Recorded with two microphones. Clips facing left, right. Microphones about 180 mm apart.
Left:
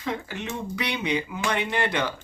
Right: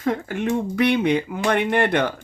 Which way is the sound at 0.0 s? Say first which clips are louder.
Right 8 dB; 50° right (ahead or behind).